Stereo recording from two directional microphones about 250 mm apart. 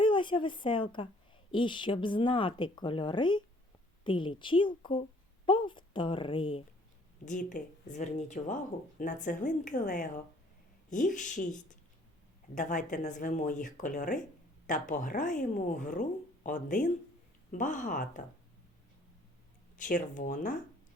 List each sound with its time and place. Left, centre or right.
0.0 s a woman's voice: centre
12.5 s a woman's voice: left
19.7 s a woman's voice: left